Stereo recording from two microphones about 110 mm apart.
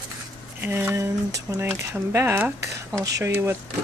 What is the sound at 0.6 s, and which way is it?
Speech, 20° right (ahead or behind).